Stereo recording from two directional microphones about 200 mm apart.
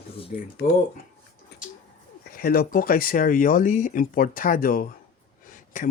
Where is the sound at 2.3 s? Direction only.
50° left (ahead or behind).